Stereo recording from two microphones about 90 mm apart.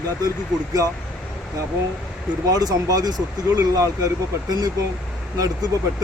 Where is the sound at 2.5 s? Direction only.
45° right (ahead or behind).